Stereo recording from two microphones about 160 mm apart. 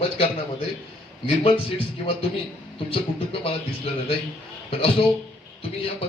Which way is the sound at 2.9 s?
35° left (ahead or behind).